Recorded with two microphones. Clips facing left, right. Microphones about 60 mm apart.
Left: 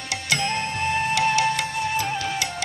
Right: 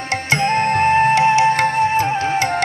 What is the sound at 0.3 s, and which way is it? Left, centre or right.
Music, right.